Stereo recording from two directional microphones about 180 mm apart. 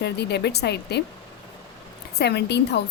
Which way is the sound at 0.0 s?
70° left (ahead or behind).